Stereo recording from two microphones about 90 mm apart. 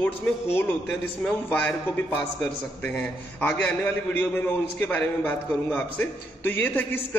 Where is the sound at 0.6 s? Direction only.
20° left (ahead or behind).